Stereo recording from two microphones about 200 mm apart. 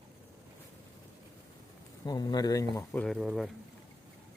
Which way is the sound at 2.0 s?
20° left (ahead or behind).